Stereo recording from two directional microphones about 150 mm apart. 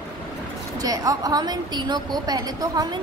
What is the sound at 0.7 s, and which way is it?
A woman's voice, 25° right (ahead or behind).